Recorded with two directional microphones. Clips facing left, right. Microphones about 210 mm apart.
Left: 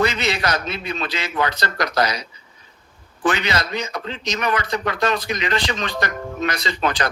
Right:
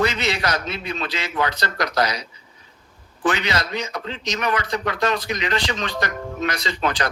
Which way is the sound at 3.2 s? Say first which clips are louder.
Left 1 dB; 50° left (ahead or behind).